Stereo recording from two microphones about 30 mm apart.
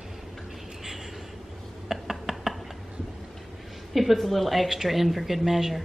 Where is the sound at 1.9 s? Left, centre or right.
Centre.